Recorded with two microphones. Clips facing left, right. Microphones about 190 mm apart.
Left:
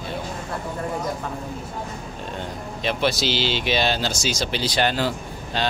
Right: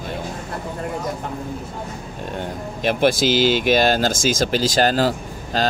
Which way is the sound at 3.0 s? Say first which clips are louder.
Right 7 dB; 50° right (ahead or behind).